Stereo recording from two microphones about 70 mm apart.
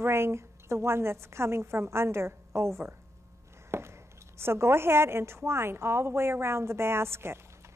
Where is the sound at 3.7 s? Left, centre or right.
Right.